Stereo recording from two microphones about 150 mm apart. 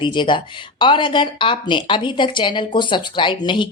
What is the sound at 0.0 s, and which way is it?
Speech, 30° left (ahead or behind).